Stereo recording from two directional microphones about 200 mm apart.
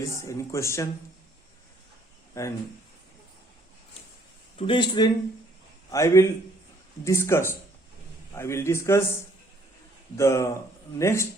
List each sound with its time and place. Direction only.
0.0 s speech: 15° left (ahead or behind)
2.3 s speech: 15° left (ahead or behind)
4.5 s speech: 25° left (ahead or behind)
10.2 s speech: 15° left (ahead or behind)